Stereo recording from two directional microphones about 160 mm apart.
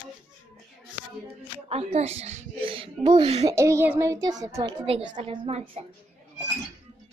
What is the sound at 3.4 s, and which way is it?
A child's voice, 20° right (ahead or behind).